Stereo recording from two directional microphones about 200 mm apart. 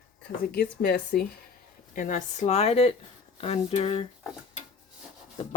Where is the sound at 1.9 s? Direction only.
40° left (ahead or behind).